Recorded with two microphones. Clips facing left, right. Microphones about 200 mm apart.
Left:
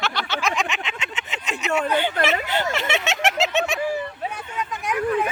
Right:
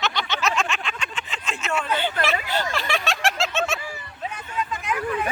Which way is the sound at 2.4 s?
20° left (ahead or behind).